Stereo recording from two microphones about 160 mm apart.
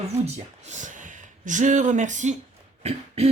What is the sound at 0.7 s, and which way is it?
Speech, 50° right (ahead or behind).